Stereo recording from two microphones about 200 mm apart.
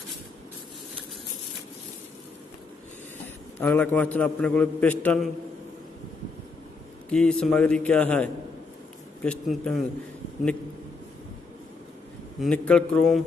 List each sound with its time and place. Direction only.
3.5 s a man's voice: 10° left (ahead or behind)
7.1 s a man's voice: 5° left (ahead or behind)
12.4 s a man's voice: 5° left (ahead or behind)